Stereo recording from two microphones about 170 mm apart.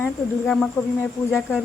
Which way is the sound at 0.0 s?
5° left (ahead or behind).